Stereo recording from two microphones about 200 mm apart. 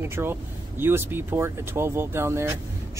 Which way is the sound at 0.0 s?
10° right (ahead or behind).